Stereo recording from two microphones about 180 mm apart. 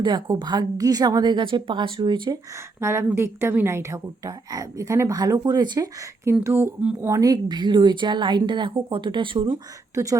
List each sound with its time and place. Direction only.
0.0 s a woman's voice: 25° right (ahead or behind)
2.8 s a woman's voice: 15° right (ahead or behind)